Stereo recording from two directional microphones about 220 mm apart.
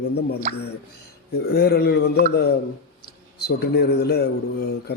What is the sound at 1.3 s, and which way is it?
Speech, 45° left (ahead or behind).